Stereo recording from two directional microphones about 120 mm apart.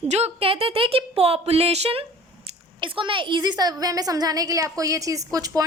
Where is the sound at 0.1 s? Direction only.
55° right (ahead or behind).